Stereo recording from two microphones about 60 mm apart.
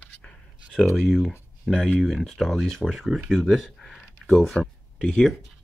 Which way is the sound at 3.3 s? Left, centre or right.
Centre.